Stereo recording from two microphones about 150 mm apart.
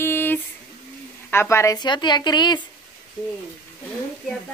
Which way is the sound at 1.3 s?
15° left (ahead or behind).